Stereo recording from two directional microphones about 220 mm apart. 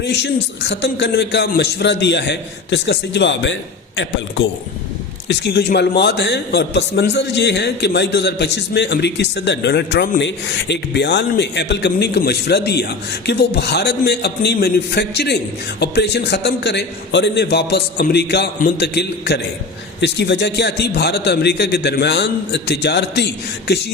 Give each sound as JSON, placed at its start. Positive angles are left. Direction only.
{"t": 0.0, "sound": "a man's voice", "side_deg": 50}